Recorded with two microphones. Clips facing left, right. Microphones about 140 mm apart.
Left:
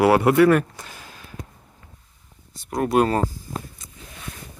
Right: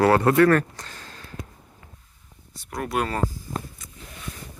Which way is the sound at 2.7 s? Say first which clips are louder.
Left 7 dB; 30° left (ahead or behind).